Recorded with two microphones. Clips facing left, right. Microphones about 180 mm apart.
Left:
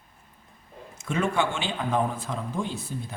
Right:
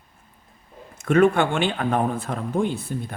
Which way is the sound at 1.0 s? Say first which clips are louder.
Right 8 dB; 60° right (ahead or behind).